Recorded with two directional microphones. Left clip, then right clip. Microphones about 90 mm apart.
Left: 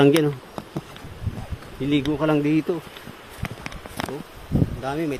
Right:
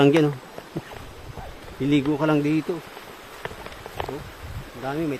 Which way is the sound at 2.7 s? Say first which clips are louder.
Left 3 dB; 40° left (ahead or behind).